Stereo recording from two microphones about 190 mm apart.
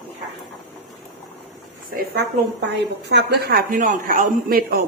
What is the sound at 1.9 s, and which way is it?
A woman's voice, 60° right (ahead or behind).